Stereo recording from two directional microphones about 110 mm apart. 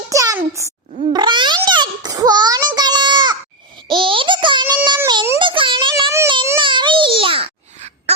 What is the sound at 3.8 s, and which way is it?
Child singing, 50° right (ahead or behind).